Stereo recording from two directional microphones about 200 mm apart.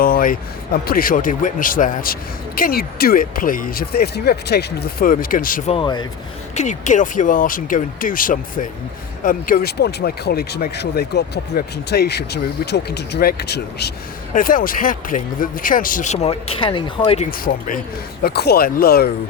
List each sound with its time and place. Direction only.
0.0 s speech: 45° left (ahead or behind)
5.7 s speech: 20° left (ahead or behind)
6.6 s speech: 35° left (ahead or behind); by 13.9 s 55° left (ahead or behind)
14.3 s speech: 45° left (ahead or behind); by 17.2 s 25° left (ahead or behind)
17.3 s speech: 45° left (ahead or behind)